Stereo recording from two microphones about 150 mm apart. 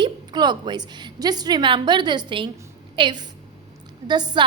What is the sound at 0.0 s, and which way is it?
A woman's voice, 30° right (ahead or behind).